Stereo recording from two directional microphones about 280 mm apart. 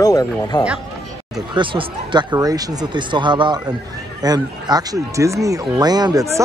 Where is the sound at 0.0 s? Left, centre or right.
Centre.